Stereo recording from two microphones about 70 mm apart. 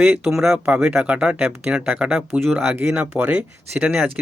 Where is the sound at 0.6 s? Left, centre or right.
Right.